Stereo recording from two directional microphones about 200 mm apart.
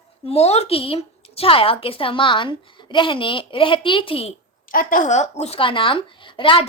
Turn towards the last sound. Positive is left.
turn(degrees=25)  # may be behind; listen again after turning